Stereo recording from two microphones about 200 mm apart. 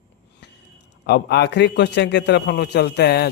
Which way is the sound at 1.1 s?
55° left (ahead or behind).